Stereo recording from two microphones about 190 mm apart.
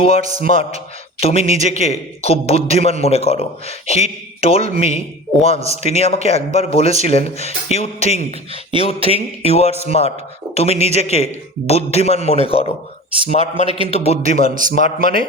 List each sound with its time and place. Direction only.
0.2 s speech: 45° right (ahead or behind)
1.2 s speech: 30° left (ahead or behind)
13.7 s a man's voice: 25° right (ahead or behind)
13.9 s speech: 35° left (ahead or behind)
14.4 s speech: 45° right (ahead or behind)